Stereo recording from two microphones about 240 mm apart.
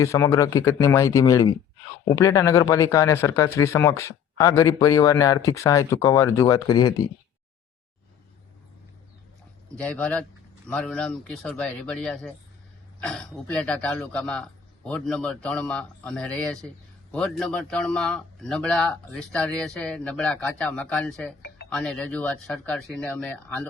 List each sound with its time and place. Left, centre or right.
0.0 s speech: centre
9.7 s speech: centre